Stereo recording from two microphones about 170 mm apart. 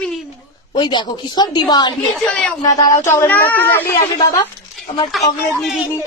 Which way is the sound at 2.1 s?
5° left (ahead or behind).